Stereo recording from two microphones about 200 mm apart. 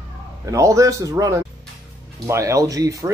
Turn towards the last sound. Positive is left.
turn(degrees=-15)  # may be behind; listen again after turning